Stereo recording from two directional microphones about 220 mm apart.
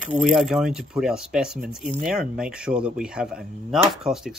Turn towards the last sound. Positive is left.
turn(degrees=0)  # may be behind; listen again after turning